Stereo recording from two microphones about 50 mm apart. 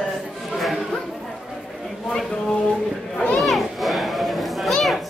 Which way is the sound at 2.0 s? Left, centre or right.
Centre.